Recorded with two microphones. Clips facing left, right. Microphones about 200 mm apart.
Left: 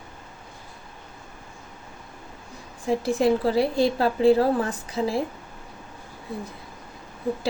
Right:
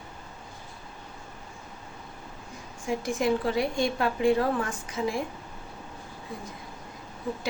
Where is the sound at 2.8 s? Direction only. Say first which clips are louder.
Left 5 dB; 35° left (ahead or behind).